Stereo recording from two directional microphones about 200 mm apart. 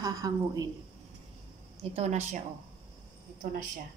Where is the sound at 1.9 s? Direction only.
35° right (ahead or behind).